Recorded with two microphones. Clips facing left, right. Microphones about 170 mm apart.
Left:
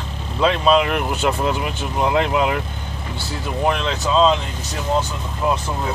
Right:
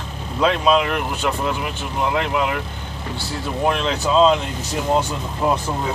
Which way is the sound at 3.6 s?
Centre (ahead or behind).